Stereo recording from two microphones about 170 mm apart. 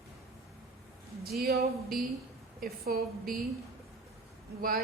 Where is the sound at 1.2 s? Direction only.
65° right (ahead or behind).